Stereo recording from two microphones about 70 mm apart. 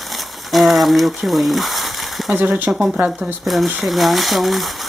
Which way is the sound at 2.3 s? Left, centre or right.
Right.